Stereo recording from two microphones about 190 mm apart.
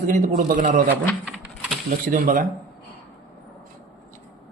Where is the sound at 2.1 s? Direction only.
45° right (ahead or behind).